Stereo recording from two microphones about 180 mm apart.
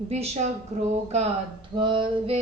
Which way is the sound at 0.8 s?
35° right (ahead or behind).